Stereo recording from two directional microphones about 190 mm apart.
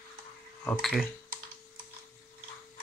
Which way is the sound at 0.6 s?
Centre (ahead or behind).